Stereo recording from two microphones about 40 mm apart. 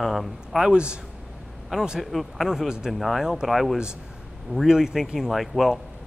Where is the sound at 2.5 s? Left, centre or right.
Centre.